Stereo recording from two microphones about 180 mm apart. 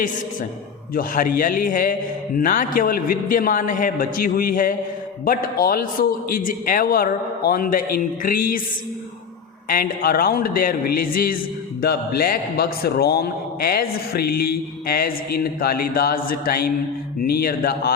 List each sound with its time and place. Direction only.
0.9 s a man's voice: 50° left (ahead or behind)
9.6 s a man's voice: 55° left (ahead or behind)